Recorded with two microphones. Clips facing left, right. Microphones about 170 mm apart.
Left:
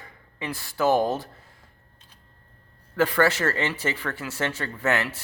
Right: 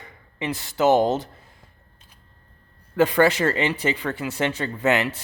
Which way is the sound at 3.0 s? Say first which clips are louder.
Right 4 dB; 20° right (ahead or behind).